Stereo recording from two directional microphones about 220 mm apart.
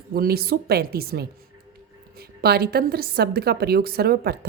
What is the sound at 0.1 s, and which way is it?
A woman's voice, 45° right (ahead or behind).